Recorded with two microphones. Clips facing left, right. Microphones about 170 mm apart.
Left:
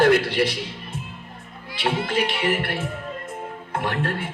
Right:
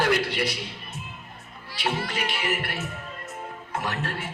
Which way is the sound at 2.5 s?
55° left (ahead or behind).